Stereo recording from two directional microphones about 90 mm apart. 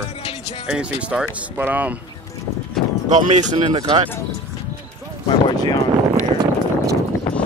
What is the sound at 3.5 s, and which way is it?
Speech, 50° right (ahead or behind).